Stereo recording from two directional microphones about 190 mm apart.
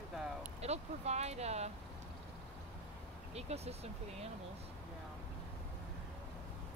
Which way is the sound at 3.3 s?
35° right (ahead or behind).